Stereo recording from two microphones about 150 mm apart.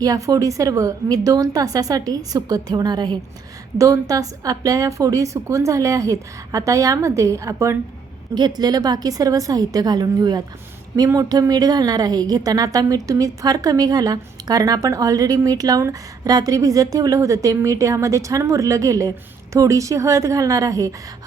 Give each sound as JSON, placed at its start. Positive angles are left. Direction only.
{"t": 0.0, "sound": "a woman's voice", "side_deg": -25}